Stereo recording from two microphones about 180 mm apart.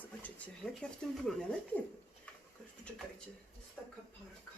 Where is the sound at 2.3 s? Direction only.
5° left (ahead or behind).